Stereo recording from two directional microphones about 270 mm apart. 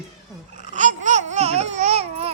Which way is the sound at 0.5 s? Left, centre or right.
Right.